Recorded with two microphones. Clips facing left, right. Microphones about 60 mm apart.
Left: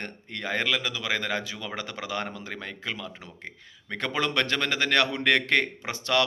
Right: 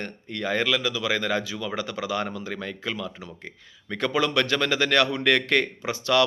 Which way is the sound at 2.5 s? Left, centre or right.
Centre.